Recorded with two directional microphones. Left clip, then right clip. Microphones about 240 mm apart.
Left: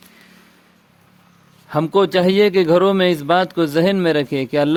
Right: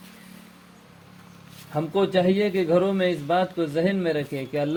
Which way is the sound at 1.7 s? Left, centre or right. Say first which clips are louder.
Left 7 dB; left.